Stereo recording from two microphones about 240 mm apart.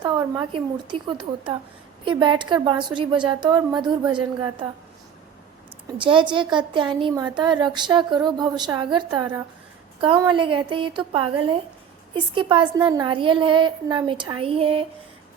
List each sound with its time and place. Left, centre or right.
0.0 s a woman's voice: centre
6.0 s speech: centre